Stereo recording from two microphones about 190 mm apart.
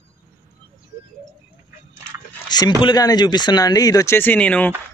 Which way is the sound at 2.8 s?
20° left (ahead or behind).